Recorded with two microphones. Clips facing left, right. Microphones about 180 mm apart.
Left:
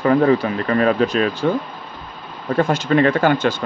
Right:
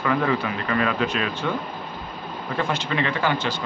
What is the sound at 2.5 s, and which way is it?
Speech, 45° left (ahead or behind).